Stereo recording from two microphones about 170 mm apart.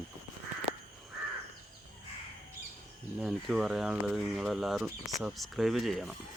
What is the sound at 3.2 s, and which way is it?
Speech, centre (ahead or behind).